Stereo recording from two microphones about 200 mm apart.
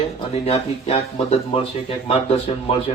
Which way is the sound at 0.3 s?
30° left (ahead or behind).